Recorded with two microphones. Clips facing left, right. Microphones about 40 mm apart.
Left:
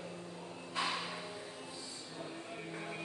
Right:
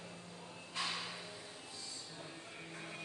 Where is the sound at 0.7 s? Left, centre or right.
Centre.